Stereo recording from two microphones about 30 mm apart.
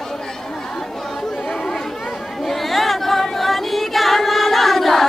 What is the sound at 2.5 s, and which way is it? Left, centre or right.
Singing, centre.